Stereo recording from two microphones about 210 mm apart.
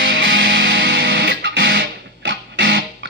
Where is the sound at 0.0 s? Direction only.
60° right (ahead or behind).